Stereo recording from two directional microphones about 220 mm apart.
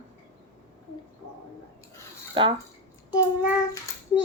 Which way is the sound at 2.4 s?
20° right (ahead or behind).